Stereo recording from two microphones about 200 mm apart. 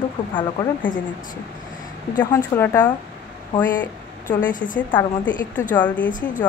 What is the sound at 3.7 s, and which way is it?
Speech, 40° left (ahead or behind).